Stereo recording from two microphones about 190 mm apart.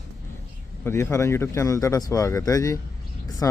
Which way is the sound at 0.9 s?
15° left (ahead or behind).